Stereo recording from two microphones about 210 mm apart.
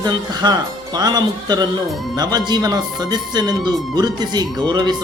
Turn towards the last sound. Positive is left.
turn(degrees=-20)  # may be behind; listen again after turning